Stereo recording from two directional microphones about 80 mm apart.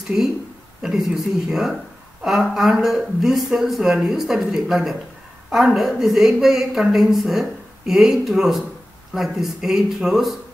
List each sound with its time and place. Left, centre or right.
0.8 s a woman's voice: centre